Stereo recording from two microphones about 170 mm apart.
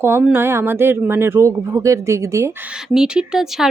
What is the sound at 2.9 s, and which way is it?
Speech, 5° right (ahead or behind).